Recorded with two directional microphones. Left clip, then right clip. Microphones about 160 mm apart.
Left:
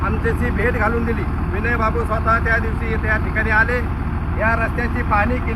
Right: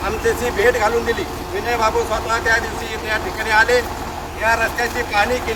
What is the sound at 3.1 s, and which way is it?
Speech, 20° right (ahead or behind).